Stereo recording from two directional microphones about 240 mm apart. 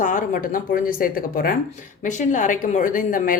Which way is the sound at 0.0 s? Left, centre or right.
Left.